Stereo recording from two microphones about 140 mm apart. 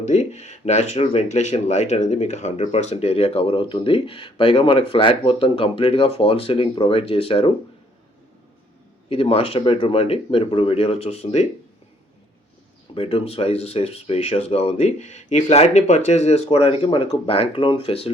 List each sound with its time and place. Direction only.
0.0 s speech: 55° left (ahead or behind)
9.0 s speech: 45° left (ahead or behind)
12.9 s speech: 40° left (ahead or behind)